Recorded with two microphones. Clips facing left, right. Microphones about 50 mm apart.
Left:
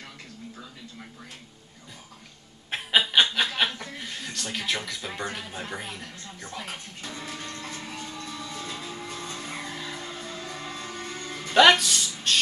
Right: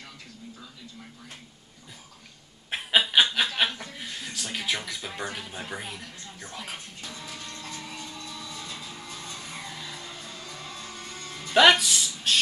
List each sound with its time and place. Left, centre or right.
2.7 s snicker: centre
3.5 s speech: centre
6.4 s music: centre
7.2 s music: left
8.5 s vehicle: left
11.5 s a sound: centre